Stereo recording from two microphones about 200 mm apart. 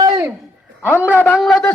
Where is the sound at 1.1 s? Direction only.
10° left (ahead or behind).